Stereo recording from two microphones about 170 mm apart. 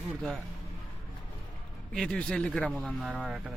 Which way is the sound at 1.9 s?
5° left (ahead or behind).